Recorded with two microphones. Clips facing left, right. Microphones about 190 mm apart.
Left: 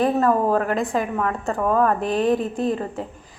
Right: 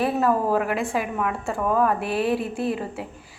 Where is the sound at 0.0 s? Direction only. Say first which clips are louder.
Left 3 dB; 5° right (ahead or behind).